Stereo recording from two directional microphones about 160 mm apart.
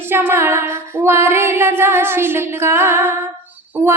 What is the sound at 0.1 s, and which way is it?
Music, 15° right (ahead or behind).